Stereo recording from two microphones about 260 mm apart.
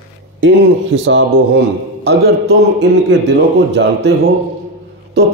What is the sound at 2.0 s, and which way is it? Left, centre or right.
A man's voice, right.